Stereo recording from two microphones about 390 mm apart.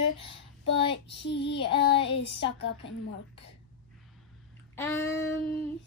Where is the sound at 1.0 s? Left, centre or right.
Left.